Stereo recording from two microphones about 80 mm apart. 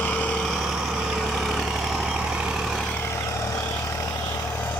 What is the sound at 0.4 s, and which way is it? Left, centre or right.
Vehicle, centre.